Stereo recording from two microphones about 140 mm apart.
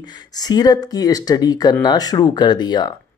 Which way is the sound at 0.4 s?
30° left (ahead or behind).